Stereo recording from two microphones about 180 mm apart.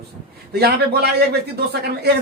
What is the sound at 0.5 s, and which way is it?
Speech, 60° right (ahead or behind).